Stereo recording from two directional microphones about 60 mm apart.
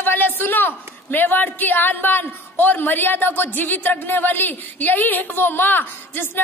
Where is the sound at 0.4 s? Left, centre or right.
Left.